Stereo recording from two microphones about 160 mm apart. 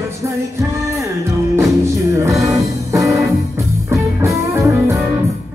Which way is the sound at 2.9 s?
20° right (ahead or behind).